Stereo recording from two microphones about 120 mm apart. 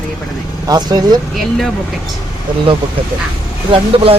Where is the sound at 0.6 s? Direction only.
35° right (ahead or behind).